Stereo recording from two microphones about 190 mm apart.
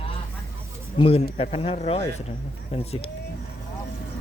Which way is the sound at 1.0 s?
30° left (ahead or behind).